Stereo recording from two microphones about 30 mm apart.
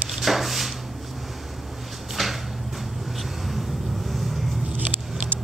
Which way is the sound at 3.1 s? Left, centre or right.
Centre.